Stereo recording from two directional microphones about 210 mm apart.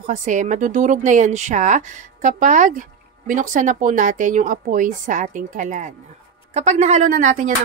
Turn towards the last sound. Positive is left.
turn(degrees=-35)  # may be behind; listen again after turning